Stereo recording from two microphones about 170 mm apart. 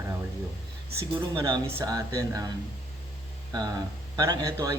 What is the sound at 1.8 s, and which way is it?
Speech, 20° right (ahead or behind).